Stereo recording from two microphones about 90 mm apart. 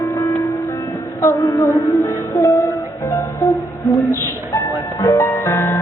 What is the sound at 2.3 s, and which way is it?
Music, 40° left (ahead or behind).